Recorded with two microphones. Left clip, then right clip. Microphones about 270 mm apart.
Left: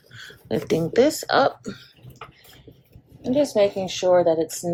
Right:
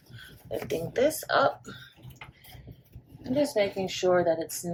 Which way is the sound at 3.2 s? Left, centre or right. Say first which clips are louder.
Left 7 dB; left.